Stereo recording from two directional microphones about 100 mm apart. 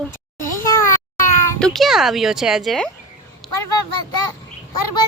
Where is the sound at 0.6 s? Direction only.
30° left (ahead or behind).